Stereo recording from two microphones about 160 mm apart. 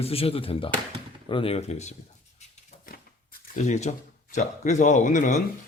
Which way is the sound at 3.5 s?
45° left (ahead or behind).